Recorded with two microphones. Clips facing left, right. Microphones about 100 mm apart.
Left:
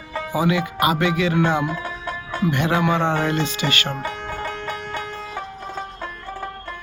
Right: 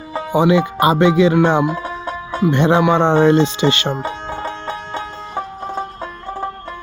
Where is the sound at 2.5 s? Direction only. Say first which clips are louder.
Right 7 dB; 25° right (ahead or behind).